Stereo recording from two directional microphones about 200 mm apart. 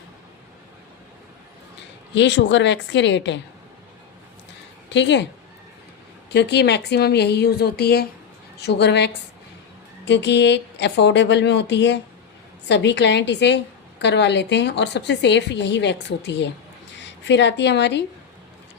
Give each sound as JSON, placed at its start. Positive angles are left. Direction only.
{"t": 2.1, "sound": "a woman's voice", "side_deg": 60}
{"t": 4.9, "sound": "a woman's voice", "side_deg": 60}
{"t": 6.3, "sound": "a woman's voice", "side_deg": 60}
{"t": 10.1, "sound": "a woman's voice", "side_deg": 60}